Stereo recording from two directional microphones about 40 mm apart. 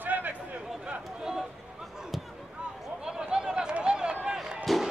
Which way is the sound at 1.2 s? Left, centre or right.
Centre.